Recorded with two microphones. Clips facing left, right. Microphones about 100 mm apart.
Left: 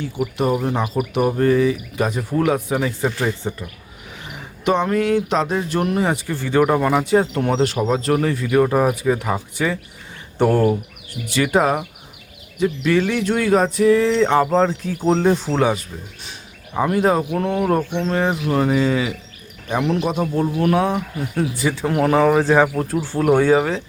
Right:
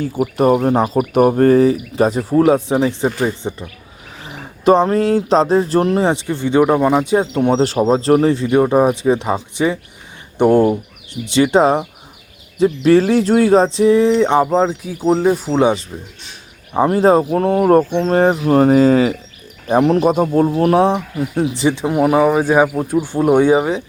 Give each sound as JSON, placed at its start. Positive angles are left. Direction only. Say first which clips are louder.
{"t": 0.0, "sound": "speech", "louder": "right 6 dB", "side_deg": -40}
{"t": 4.4, "sound": "speech", "louder": "right 7 dB", "side_deg": -35}
{"t": 7.5, "sound": "speech", "louder": "right 5 dB", "side_deg": -30}
{"t": 15.5, "sound": "speech", "louder": "right 4 dB", "side_deg": -20}
{"t": 16.7, "sound": "speech", "louder": "right 5 dB", "side_deg": -30}